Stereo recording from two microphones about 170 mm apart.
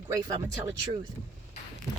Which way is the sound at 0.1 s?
25° right (ahead or behind).